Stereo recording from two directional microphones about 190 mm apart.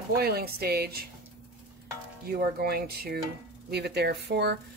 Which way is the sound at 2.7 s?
55° right (ahead or behind).